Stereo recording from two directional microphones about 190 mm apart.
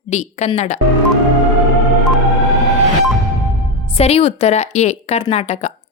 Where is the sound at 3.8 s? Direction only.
30° left (ahead or behind).